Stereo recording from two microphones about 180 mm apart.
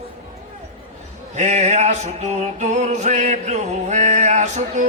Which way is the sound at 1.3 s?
40° right (ahead or behind).